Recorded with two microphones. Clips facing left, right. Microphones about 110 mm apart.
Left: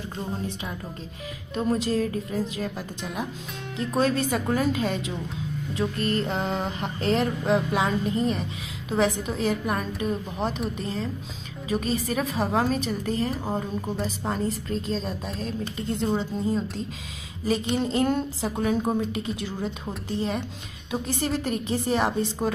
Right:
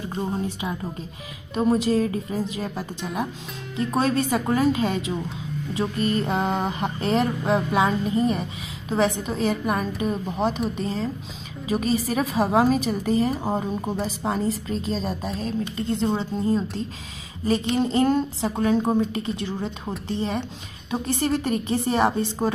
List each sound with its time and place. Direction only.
1.5 s mantra: 5° right (ahead or behind)
13.4 s speech: 25° right (ahead or behind)
13.9 s mantra: centre (ahead or behind)